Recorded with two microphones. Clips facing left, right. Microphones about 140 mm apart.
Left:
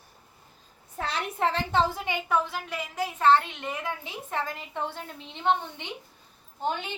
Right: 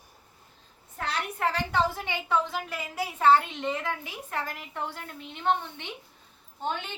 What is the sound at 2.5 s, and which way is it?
A woman's voice, 5° right (ahead or behind).